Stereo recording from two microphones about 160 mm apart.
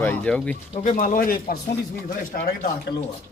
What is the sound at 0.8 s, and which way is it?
Speech, 55° left (ahead or behind).